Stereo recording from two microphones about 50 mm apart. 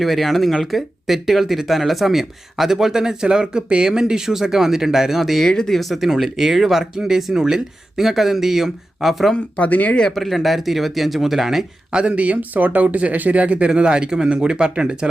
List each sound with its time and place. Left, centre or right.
0.0 s speech: centre
5.5 s speech: centre
9.6 s speech: left
9.9 s speech: centre
10.2 s speech: centre
11.9 s speech: centre